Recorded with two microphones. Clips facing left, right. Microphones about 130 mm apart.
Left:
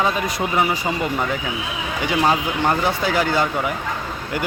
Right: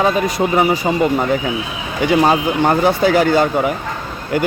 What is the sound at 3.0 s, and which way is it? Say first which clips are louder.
Speech: right 9 dB; 55° right (ahead or behind).